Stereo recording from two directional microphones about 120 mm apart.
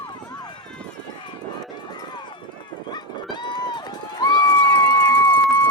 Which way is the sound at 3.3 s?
40° left (ahead or behind).